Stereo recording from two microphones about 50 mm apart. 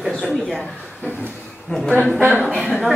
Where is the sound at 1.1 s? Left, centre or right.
Right.